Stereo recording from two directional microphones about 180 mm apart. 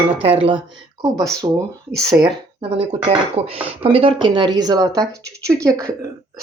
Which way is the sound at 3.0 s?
30° right (ahead or behind).